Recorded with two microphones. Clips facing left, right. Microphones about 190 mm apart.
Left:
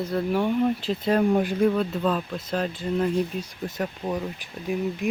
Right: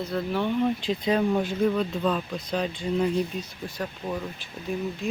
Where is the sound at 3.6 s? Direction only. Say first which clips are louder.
Left 5 dB; 20° left (ahead or behind).